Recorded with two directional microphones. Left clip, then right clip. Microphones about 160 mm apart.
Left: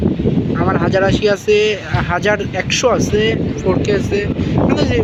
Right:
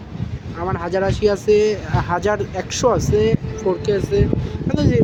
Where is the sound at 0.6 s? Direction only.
Centre (ahead or behind).